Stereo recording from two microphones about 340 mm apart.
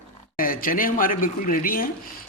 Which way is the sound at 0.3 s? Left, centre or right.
Left.